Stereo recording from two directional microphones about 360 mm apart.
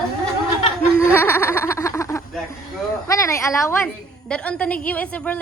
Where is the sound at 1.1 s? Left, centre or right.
Centre.